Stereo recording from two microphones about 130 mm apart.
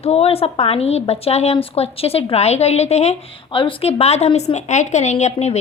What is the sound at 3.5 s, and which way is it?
A woman's voice, 45° left (ahead or behind).